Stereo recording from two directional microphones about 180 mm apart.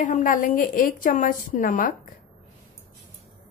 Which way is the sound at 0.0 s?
45° left (ahead or behind).